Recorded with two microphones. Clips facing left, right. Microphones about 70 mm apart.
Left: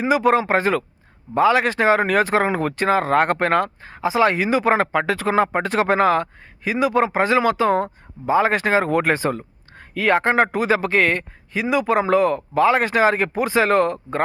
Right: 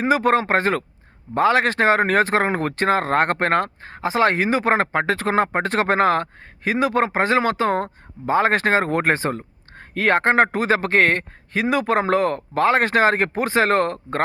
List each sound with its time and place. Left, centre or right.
0.0 s speech: right